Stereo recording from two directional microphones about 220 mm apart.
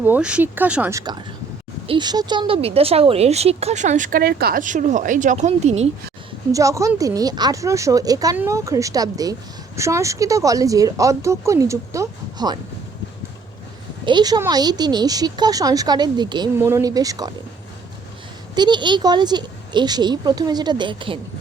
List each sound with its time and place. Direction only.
0.0 s speech: 5° right (ahead or behind); by 5.9 s 30° right (ahead or behind)
6.5 s speech: 15° right (ahead or behind)
14.0 s speech: 20° right (ahead or behind)
18.5 s speech: 20° right (ahead or behind)